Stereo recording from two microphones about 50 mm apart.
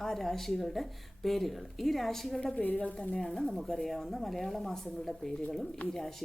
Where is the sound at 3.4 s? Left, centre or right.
Centre.